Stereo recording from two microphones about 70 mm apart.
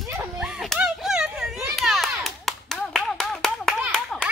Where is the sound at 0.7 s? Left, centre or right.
Centre.